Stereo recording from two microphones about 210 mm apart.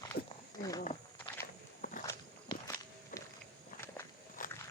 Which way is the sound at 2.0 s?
15° left (ahead or behind).